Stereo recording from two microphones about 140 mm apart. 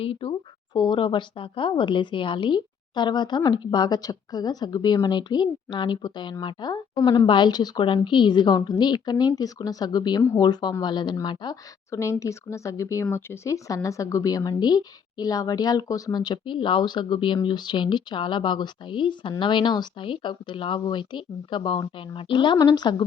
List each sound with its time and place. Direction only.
0.0 s a woman's voice: 40° left (ahead or behind)